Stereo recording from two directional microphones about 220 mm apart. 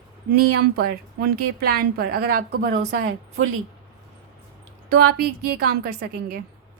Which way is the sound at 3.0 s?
70° right (ahead or behind).